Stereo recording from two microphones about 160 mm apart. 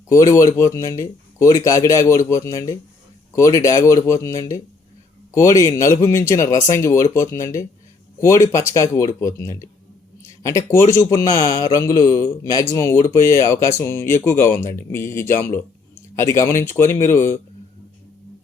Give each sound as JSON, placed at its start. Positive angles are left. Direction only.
{"t": 0.1, "sound": "speech", "side_deg": 20}